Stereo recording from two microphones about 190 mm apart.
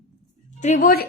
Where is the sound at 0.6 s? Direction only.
45° left (ahead or behind).